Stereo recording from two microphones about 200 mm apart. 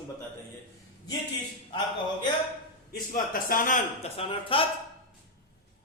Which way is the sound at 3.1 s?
45° left (ahead or behind).